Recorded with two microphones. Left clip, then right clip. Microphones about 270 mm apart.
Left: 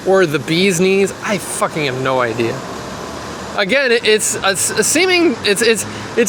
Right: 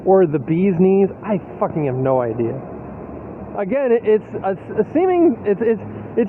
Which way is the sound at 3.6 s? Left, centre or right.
Centre.